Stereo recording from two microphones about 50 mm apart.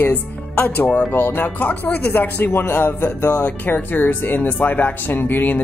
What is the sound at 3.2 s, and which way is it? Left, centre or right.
Speech, left.